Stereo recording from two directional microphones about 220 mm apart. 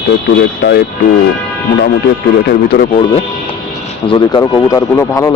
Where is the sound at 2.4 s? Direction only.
45° left (ahead or behind).